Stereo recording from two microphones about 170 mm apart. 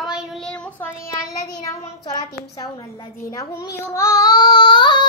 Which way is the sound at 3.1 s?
15° left (ahead or behind).